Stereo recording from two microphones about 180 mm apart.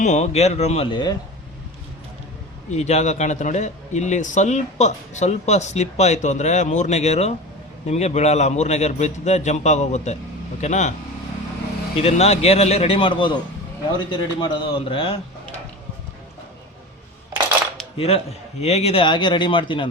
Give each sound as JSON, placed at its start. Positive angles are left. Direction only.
{"t": 0.0, "sound": "a man's voice", "side_deg": 40}
{"t": 2.6, "sound": "a man's voice", "side_deg": 40}
{"t": 11.9, "sound": "a man's voice", "side_deg": 35}
{"t": 17.9, "sound": "speech", "side_deg": 35}